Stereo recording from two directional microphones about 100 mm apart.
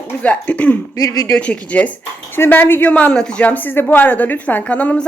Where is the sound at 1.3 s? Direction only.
10° left (ahead or behind).